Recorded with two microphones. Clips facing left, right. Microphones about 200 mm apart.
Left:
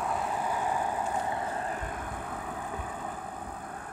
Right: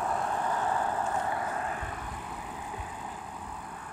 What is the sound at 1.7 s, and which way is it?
Vehicle, 45° left (ahead or behind).